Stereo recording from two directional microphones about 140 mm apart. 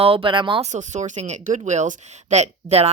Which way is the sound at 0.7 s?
60° right (ahead or behind).